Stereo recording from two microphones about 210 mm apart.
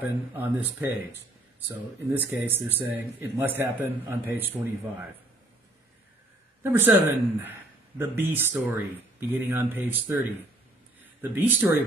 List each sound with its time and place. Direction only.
0.0 s speech: 10° right (ahead or behind)
6.6 s speech: 10° right (ahead or behind)